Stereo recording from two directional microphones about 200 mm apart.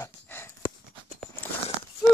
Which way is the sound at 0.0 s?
10° left (ahead or behind).